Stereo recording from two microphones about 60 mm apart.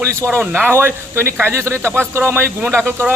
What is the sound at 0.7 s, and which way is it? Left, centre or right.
Speech, right.